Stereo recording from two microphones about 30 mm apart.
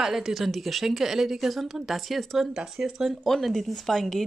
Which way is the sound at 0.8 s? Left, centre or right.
Centre.